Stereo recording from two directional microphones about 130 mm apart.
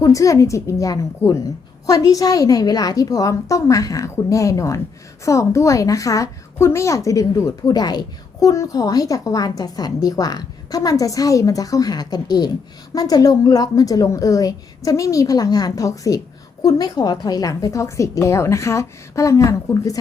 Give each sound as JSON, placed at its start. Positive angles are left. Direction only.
{"t": 0.0, "sound": "a woman's voice", "side_deg": 25}